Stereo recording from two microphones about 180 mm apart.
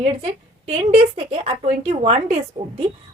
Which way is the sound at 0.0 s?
35° right (ahead or behind).